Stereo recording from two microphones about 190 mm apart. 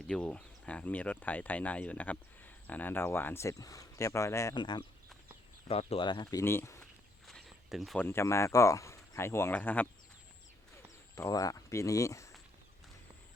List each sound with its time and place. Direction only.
0.1 s speech: 5° left (ahead or behind); by 6.4 s 25° left (ahead or behind)
6.4 s speech: 10° left (ahead or behind)
7.3 s a sound: centre (ahead or behind)
8.0 s speech: 15° left (ahead or behind)
11.1 s speech: 15° left (ahead or behind)